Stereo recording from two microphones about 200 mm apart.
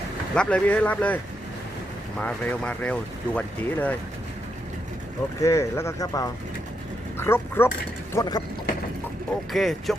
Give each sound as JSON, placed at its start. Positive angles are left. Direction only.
{"t": 0.3, "sound": "speech", "side_deg": 5}
{"t": 5.4, "sound": "speech", "side_deg": 15}
{"t": 9.5, "sound": "speech", "side_deg": 0}